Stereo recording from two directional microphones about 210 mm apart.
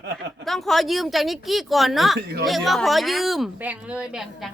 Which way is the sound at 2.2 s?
50° right (ahead or behind).